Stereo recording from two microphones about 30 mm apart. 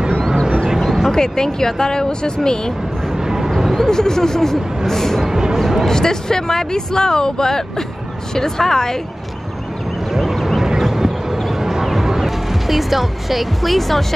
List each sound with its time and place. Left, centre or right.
0.7 s a sound: centre
1.1 s speech: centre
3.3 s a sound: centre
3.7 s speech: centre
5.2 s speech: centre
5.9 s speech: centre
10.1 s a sound: centre
11.6 s music: centre
12.7 s speech: centre